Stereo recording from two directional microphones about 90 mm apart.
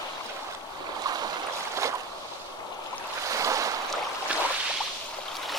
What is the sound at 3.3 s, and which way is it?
Waves, 35° right (ahead or behind).